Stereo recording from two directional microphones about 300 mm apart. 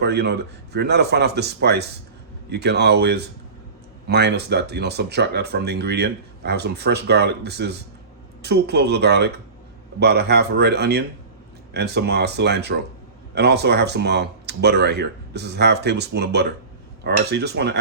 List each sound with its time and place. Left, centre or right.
0.0 s speech: right